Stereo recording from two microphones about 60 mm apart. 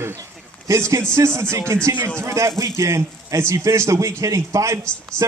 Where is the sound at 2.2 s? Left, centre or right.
Right.